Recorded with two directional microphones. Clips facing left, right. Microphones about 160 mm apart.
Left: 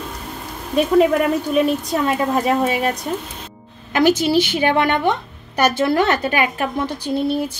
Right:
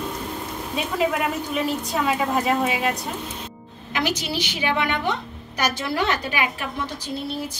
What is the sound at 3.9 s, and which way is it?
A woman's voice, 50° left (ahead or behind).